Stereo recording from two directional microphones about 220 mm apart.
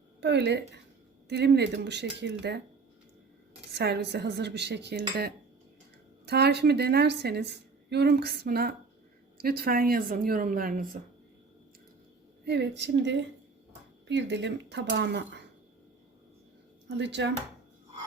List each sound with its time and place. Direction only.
0.2 s a woman's voice: 50° right (ahead or behind)
3.7 s a woman's voice: 50° right (ahead or behind)
12.5 s a woman's voice: 50° right (ahead or behind)
17.0 s a woman's voice: 50° right (ahead or behind)